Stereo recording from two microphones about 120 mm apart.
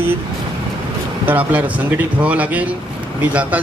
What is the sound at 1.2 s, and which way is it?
A man's voice, 15° right (ahead or behind).